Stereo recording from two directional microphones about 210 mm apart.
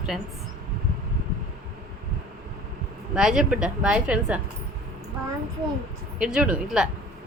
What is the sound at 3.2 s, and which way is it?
A woman's voice, 5° right (ahead or behind).